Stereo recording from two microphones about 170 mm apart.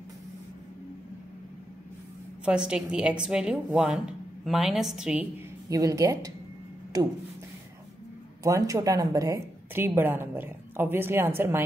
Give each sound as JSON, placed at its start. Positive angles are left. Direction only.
{"t": 2.4, "sound": "a woman's voice", "side_deg": -5}
{"t": 5.7, "sound": "a woman's voice", "side_deg": -20}
{"t": 8.5, "sound": "a woman's voice", "side_deg": -20}